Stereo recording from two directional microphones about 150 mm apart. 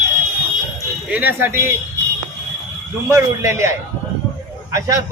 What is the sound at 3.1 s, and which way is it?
A man's voice, 20° right (ahead or behind).